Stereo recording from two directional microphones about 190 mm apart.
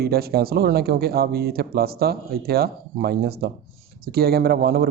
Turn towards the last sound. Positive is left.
turn(degrees=-55)  # may be behind; listen again after turning